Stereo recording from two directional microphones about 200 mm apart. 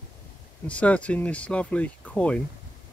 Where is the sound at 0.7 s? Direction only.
5° left (ahead or behind).